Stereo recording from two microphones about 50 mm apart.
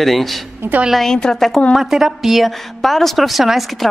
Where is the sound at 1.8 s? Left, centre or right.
Centre.